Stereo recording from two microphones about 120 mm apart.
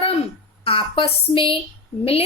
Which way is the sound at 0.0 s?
55° left (ahead or behind).